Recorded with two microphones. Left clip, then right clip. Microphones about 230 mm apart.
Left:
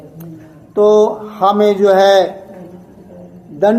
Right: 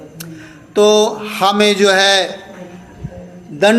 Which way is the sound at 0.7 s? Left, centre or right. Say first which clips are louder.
Left 1 dB; right.